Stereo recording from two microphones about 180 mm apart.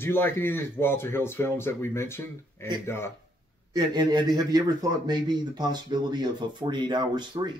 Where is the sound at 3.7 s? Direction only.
25° right (ahead or behind).